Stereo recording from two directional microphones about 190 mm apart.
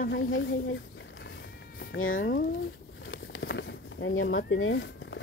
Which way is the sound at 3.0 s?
85° left.